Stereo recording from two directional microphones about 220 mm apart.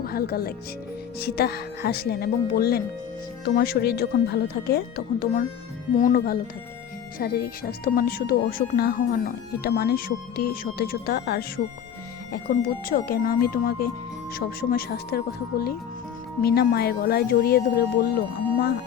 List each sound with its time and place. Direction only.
0.0 s speech: 45° left (ahead or behind)